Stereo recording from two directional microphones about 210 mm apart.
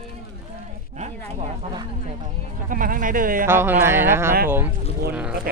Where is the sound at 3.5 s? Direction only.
10° right (ahead or behind).